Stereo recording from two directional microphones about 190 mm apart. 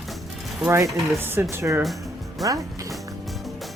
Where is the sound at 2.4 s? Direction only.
Centre (ahead or behind).